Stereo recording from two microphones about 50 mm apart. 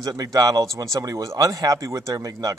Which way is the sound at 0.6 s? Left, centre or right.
Right.